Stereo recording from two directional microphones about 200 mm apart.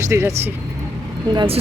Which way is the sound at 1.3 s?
25° right (ahead or behind).